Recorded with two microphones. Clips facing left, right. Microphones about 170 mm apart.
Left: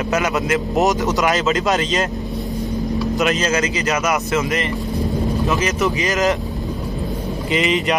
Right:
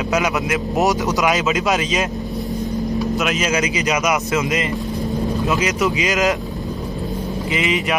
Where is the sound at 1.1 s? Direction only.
15° right (ahead or behind).